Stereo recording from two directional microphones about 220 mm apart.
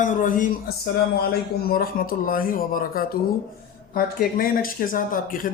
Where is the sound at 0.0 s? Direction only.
35° left (ahead or behind).